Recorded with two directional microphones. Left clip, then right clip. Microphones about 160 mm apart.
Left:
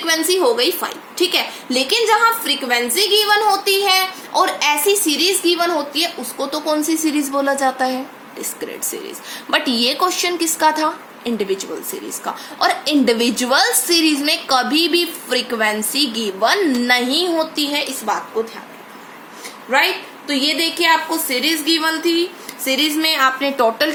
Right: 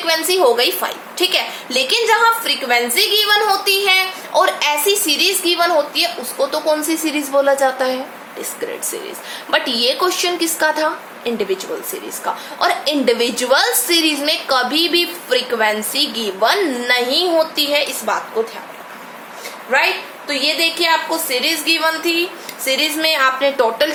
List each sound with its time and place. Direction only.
0.0 s a woman's voice: 20° left (ahead or behind)
9.5 s a woman's voice: 35° left (ahead or behind)
12.2 s a woman's voice: 30° left (ahead or behind)
19.7 s a woman's voice: 30° left (ahead or behind)